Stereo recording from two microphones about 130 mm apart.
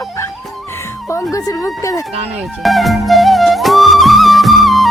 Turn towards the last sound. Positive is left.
turn(degrees=0)  # may be behind; listen again after turning